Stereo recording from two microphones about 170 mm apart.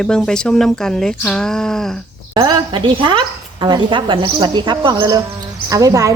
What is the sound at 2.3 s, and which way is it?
A woman's voice, 25° right (ahead or behind).